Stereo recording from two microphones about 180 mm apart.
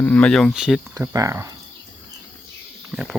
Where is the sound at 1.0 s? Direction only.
20° right (ahead or behind).